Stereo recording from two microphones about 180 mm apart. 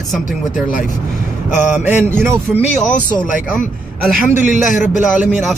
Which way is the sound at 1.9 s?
10° right (ahead or behind).